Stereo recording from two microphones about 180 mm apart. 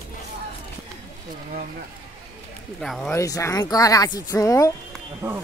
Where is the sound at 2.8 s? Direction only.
Centre (ahead or behind).